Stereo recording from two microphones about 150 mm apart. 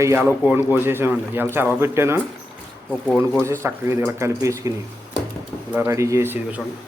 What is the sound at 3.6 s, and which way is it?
Speech, 20° right (ahead or behind).